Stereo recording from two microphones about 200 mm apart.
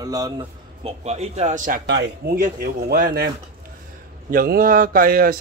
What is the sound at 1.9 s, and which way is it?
A man's voice, 55° right (ahead or behind).